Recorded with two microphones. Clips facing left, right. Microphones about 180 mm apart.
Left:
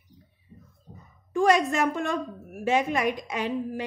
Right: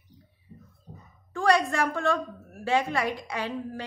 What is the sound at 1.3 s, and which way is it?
A woman's voice, 15° left (ahead or behind).